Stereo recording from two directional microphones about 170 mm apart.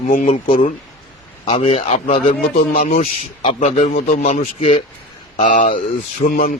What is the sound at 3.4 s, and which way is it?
Speech, 40° left (ahead or behind).